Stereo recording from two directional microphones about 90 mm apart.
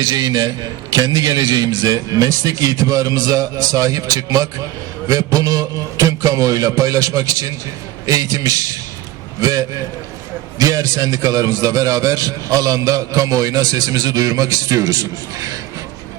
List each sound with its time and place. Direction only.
0.2 s a man's voice: 45° right (ahead or behind)